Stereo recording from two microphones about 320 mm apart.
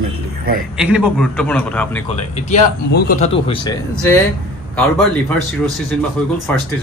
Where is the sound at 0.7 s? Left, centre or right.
Centre.